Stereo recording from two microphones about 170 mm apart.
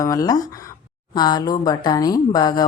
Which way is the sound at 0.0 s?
20° left (ahead or behind).